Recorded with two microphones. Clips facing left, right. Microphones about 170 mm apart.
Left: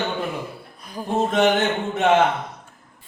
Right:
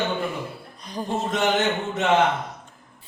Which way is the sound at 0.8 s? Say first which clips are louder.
Right 2 dB; 5° left (ahead or behind).